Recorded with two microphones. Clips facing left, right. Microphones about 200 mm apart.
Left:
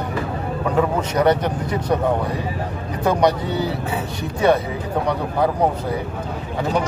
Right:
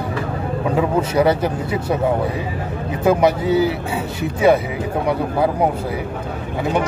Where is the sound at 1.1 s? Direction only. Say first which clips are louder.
Left 1 dB; 5° right (ahead or behind).